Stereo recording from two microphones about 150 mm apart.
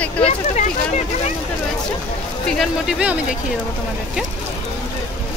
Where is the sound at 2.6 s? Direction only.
5° right (ahead or behind).